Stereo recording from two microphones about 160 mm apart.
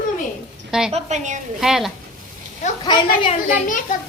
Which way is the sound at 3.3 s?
50° left (ahead or behind).